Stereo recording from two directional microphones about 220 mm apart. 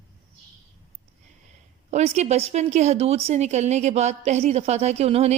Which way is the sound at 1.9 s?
30° right (ahead or behind).